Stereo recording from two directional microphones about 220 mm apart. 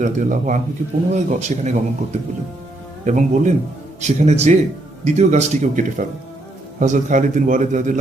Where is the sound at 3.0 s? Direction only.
35° right (ahead or behind).